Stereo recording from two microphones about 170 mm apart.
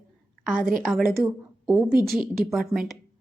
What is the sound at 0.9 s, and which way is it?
A woman's voice, centre (ahead or behind).